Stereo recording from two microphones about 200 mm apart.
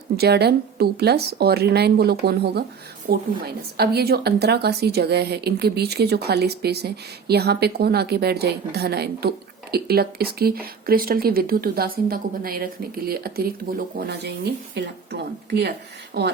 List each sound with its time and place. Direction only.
0.2 s a woman's voice: 55° right (ahead or behind)